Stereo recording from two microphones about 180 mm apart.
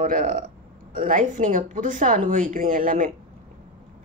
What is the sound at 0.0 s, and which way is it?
Speech, 50° right (ahead or behind).